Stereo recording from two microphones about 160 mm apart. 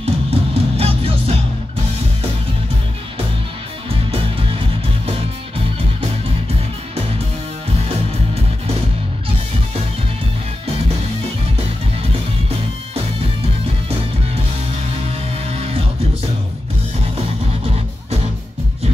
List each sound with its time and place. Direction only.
0.0 s music: 40° right (ahead or behind)
4.1 s music: 35° right (ahead or behind)
15.5 s music: 40° right (ahead or behind)